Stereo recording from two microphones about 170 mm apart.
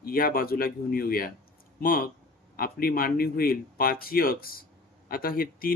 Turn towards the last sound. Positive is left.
turn(degrees=60)  # may be behind; listen again after turning